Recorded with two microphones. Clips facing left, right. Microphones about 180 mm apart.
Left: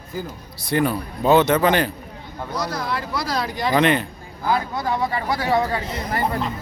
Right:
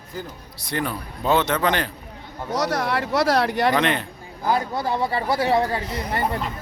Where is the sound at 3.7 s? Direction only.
5° left (ahead or behind).